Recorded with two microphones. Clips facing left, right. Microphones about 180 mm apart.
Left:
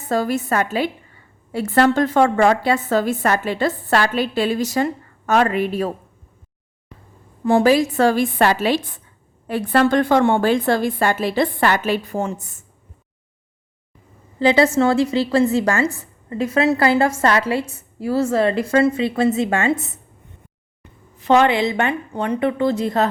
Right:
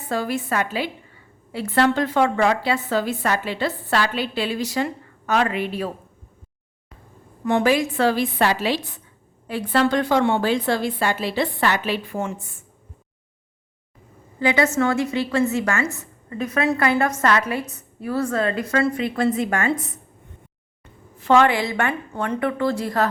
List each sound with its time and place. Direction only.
0.1 s a woman's voice: 40° left (ahead or behind)
7.4 s a woman's voice: 35° left (ahead or behind)
14.3 s a woman's voice: 35° left (ahead or behind)
21.2 s a woman's voice: 20° left (ahead or behind)